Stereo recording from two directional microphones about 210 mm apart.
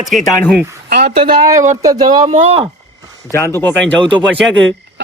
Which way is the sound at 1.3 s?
35° right (ahead or behind).